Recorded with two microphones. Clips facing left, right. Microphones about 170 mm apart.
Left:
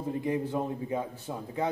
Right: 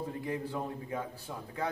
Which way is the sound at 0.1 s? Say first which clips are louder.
Left 6 dB; 20° left (ahead or behind).